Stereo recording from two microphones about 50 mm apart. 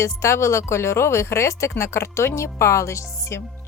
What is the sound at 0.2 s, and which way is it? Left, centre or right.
Speech, left.